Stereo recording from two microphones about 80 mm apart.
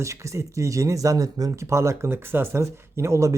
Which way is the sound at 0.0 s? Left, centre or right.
Right.